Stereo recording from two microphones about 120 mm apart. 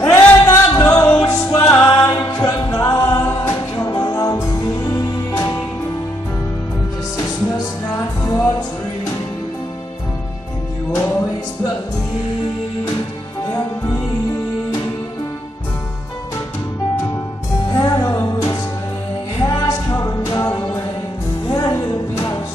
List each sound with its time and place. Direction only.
0.0 s music: 25° left (ahead or behind)
7.2 s music: 30° left (ahead or behind)
11.0 s music: 20° left (ahead or behind)
13.5 s music: 25° left (ahead or behind)
17.6 s music: 30° left (ahead or behind)